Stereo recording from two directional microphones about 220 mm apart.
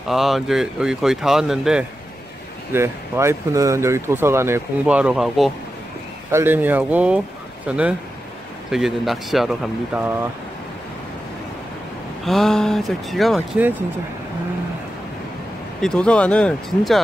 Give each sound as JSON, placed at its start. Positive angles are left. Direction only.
{"t": 0.1, "sound": "speech", "side_deg": 0}
{"t": 12.3, "sound": "speech", "side_deg": 0}
{"t": 15.8, "sound": "speech", "side_deg": 5}